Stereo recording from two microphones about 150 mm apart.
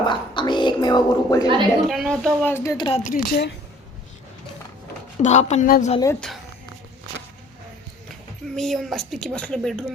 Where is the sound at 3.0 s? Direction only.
65° left (ahead or behind).